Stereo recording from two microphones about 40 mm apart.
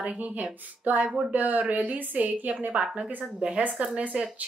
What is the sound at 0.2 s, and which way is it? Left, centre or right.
A woman's voice, right.